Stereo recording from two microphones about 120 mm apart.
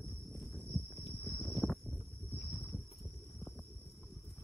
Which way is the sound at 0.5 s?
Centre (ahead or behind).